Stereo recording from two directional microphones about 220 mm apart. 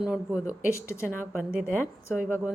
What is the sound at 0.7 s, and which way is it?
Speech, 10° left (ahead or behind).